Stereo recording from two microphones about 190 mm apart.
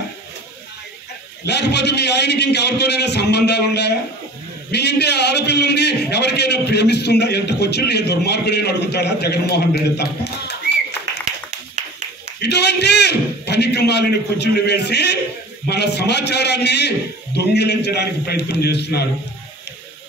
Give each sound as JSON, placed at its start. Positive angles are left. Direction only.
{"t": 1.4, "sound": "a man's voice", "side_deg": 60}
{"t": 12.4, "sound": "a man's voice", "side_deg": 60}